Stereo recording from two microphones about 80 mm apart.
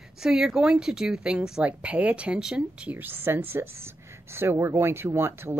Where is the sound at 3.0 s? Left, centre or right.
Right.